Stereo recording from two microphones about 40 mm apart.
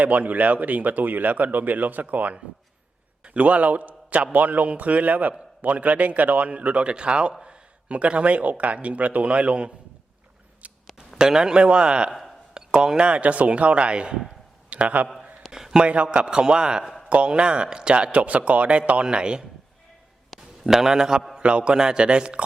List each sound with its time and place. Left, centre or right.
0.0 s speech: right
3.2 s speech: right
6.5 s speech: right
10.6 s a sound: right
11.2 s a man's voice: centre; by 15.0 s right
15.4 s a sound: centre
15.7 s speech: right
20.3 s a sound: centre
20.7 s a man's voice: centre
21.4 s speech: right